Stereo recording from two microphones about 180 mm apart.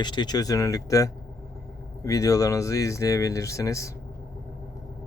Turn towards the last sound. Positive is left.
turn(degrees=15)  # may be behind; listen again after turning